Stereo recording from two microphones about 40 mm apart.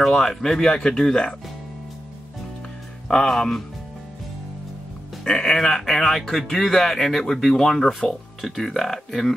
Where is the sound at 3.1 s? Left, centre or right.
Centre.